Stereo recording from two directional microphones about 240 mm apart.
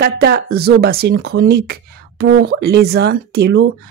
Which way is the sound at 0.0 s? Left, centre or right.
Right.